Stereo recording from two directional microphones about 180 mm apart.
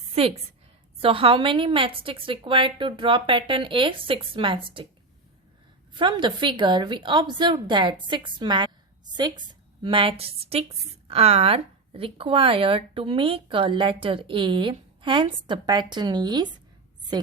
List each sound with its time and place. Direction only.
0.1 s a woman's voice: 30° right (ahead or behind)
5.9 s a woman's voice: 25° right (ahead or behind)